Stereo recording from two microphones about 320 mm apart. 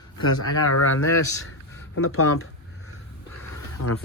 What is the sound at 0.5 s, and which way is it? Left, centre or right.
Speech, left.